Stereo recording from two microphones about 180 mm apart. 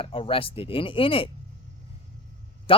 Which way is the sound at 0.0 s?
30° left (ahead or behind).